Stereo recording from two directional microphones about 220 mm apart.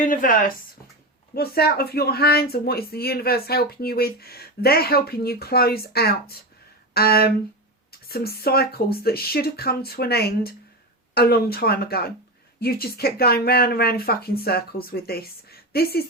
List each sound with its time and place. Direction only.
0.0 s speech: 40° left (ahead or behind)